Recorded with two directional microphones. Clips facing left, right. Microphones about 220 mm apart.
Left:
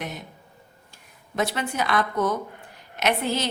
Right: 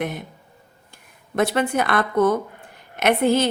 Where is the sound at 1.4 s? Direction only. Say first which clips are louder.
Right 6 dB; 55° right (ahead or behind).